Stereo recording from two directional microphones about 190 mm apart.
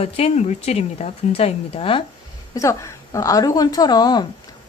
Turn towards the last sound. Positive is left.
turn(degrees=20)  # may be behind; listen again after turning